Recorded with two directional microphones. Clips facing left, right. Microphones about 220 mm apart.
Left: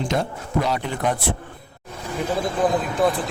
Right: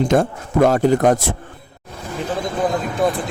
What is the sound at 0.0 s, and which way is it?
A man's voice, 50° right (ahead or behind).